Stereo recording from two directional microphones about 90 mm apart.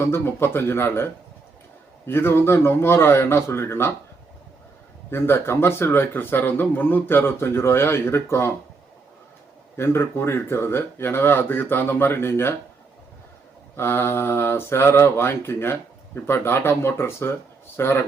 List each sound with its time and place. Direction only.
0.0 s speech: 25° left (ahead or behind)
2.0 s speech: 25° left (ahead or behind)
5.1 s speech: 30° left (ahead or behind)
9.7 s speech: 30° left (ahead or behind)
13.7 s speech: 30° left (ahead or behind)